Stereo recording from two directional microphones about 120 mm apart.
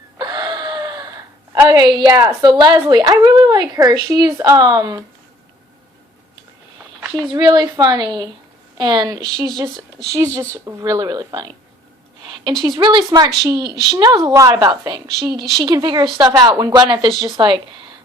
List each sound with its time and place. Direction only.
0.2 s gasp: 35° right (ahead or behind)
2.9 s speech: 35° right (ahead or behind)
7.3 s a woman's voice: 35° right (ahead or behind)
12.2 s a sound: 40° right (ahead or behind)
12.6 s a woman's voice: 40° right (ahead or behind)